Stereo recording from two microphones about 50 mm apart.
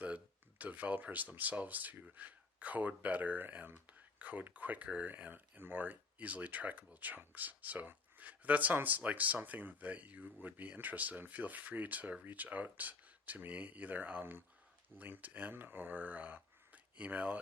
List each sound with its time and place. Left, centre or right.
0.6 s speech: right